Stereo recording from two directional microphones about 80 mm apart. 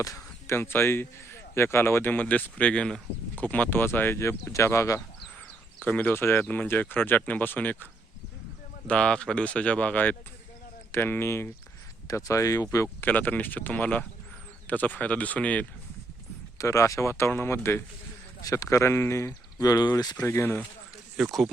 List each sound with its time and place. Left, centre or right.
0.0 s a sound: left
0.5 s a man's voice: left
5.8 s a man's voice: left
8.9 s a man's voice: centre; by 11.4 s left
12.0 s speech: left
13.0 s a man's voice: left
16.6 s speech: left
18.4 s speech: left
20.2 s speech: left
21.2 s speech: centre